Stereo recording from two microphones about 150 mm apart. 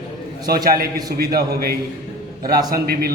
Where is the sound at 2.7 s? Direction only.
90° right.